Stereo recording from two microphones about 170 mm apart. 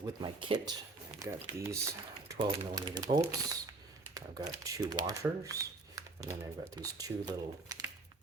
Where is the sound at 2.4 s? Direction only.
30° right (ahead or behind).